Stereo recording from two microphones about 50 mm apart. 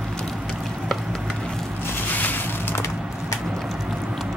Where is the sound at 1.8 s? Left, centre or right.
Left.